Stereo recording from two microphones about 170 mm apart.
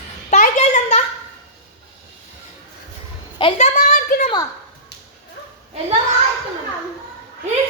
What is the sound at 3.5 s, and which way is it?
Speech, 45° left (ahead or behind).